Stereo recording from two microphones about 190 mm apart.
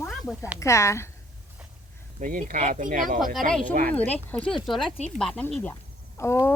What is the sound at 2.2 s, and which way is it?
Speech, 45° right (ahead or behind).